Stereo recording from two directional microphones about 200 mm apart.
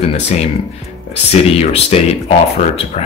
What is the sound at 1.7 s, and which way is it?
Speech, 30° left (ahead or behind).